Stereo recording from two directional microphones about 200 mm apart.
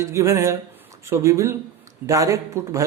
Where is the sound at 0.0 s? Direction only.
15° right (ahead or behind).